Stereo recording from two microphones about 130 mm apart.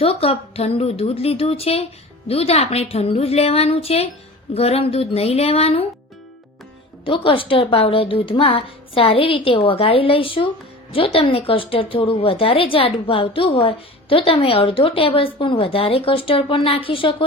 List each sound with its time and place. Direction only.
0.0 s a woman's voice: 50° left (ahead or behind)
7.0 s a woman's voice: 45° left (ahead or behind)